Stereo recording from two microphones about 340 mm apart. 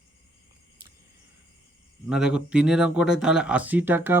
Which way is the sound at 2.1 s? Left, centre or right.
Centre.